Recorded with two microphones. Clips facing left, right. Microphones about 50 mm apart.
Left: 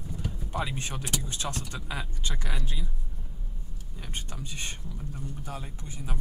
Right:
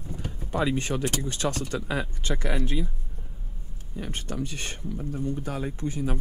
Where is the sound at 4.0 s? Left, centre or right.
Right.